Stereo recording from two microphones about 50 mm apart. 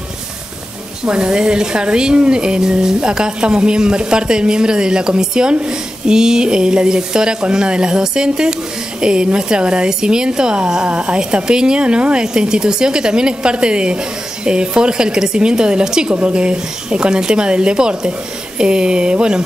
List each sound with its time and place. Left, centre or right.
1.0 s speech: centre